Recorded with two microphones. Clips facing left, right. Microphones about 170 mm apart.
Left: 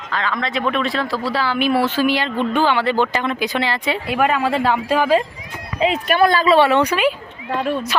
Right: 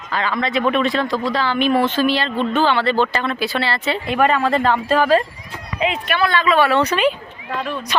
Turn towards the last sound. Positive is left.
turn(degrees=30)  # may be behind; listen again after turning